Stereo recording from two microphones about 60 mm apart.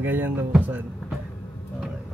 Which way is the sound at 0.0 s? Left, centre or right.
Right.